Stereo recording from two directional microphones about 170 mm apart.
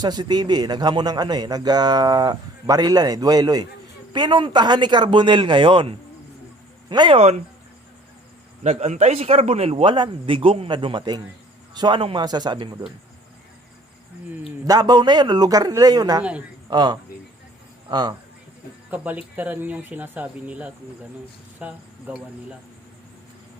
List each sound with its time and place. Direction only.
0.0 s a man's voice: 25° right (ahead or behind)
7.2 s a man's voice: 40° right (ahead or behind)
8.6 s a man's voice: 40° right (ahead or behind)
14.3 s speech: 10° right (ahead or behind)
14.7 s a man's voice: 25° right (ahead or behind)
18.9 s speech: 10° right (ahead or behind)